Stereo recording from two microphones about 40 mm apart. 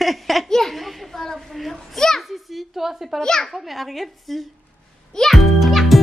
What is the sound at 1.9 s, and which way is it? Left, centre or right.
Children playing, centre.